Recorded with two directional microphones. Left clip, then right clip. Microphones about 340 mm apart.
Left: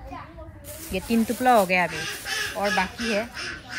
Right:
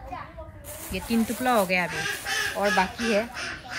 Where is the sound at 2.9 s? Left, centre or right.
Right.